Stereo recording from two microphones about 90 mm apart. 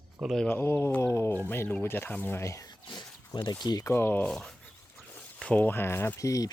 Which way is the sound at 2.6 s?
55° left (ahead or behind).